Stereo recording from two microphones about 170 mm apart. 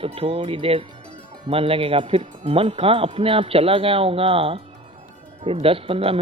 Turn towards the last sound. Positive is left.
turn(degrees=-35)  # may be behind; listen again after turning